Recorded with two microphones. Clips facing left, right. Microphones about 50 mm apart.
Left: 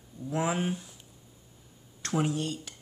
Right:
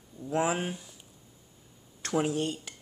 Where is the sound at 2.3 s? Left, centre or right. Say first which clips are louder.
Right 2 dB; right.